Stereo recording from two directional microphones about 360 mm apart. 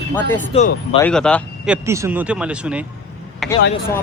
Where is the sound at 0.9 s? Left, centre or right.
Centre.